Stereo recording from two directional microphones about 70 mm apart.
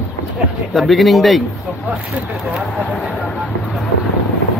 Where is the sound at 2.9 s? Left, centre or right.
Centre.